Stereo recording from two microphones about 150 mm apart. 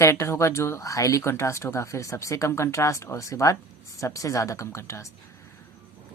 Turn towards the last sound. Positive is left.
turn(degrees=20)  # may be behind; listen again after turning